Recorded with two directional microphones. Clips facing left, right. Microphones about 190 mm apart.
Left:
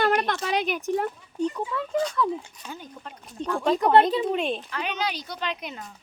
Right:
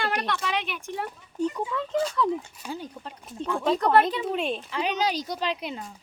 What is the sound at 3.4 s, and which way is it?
Speech, 5° right (ahead or behind).